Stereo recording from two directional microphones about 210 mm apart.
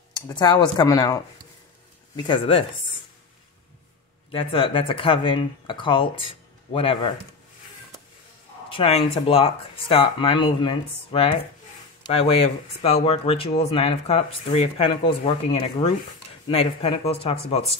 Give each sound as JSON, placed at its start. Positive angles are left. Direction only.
{"t": 0.1, "sound": "speech", "side_deg": 20}
{"t": 4.3, "sound": "speech", "side_deg": 25}
{"t": 8.6, "sound": "speech", "side_deg": 25}